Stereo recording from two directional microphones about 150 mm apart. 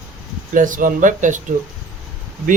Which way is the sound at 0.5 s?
60° right (ahead or behind).